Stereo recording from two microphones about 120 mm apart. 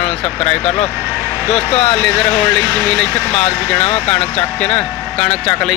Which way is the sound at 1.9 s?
5° left (ahead or behind).